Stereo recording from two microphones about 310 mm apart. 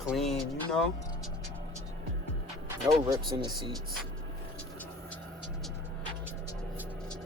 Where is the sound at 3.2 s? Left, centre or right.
Centre.